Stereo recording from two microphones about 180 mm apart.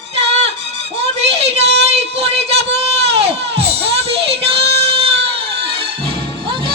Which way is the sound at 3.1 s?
35° right (ahead or behind).